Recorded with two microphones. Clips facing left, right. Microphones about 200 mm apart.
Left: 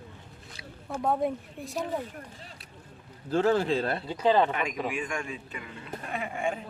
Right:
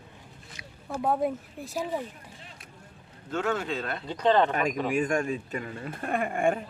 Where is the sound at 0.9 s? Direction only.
5° right (ahead or behind).